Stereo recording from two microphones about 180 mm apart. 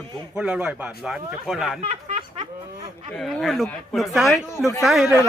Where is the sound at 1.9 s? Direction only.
35° right (ahead or behind).